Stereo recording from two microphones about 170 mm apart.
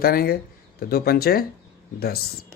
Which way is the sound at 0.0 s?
60° left (ahead or behind).